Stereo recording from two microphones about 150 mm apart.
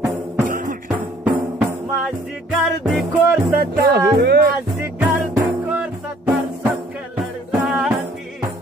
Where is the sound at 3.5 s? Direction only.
90° right.